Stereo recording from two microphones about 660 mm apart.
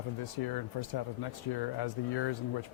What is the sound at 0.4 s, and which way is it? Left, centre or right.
Speech, left.